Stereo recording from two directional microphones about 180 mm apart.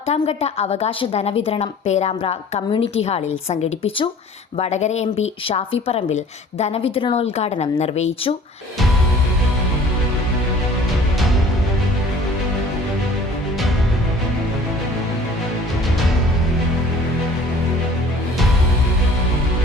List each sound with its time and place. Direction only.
0.1 s a woman's voice: 35° left (ahead or behind)